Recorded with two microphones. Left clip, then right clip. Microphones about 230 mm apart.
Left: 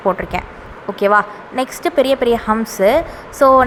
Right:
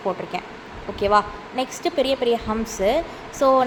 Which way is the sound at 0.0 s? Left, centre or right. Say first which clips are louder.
Left 8 dB; left.